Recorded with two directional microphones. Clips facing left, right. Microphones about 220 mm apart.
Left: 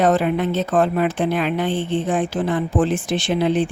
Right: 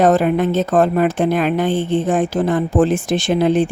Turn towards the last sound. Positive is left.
turn(degrees=-45)  # may be behind; listen again after turning